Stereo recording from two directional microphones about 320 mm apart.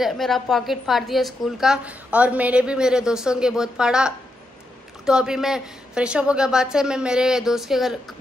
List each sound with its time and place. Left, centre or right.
0.0 s a woman's voice: centre